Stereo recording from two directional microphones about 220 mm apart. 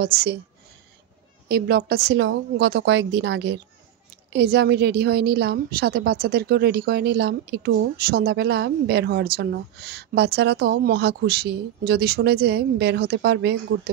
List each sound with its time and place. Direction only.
0.0 s a woman's voice: 45° right (ahead or behind)
1.5 s a woman's voice: 45° right (ahead or behind)